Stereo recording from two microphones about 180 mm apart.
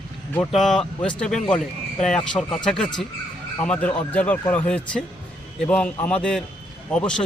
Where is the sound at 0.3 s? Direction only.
5° left (ahead or behind).